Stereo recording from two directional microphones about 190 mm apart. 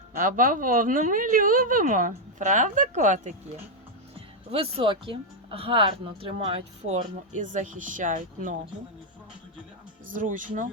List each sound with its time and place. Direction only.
0.2 s a woman's voice: 45° right (ahead or behind)
4.5 s speech: 30° right (ahead or behind)
10.1 s a woman's voice: 45° right (ahead or behind)